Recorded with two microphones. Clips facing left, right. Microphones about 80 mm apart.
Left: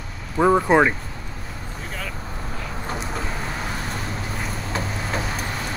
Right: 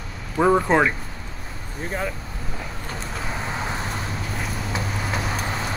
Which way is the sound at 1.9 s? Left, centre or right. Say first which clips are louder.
Right 7 dB; right.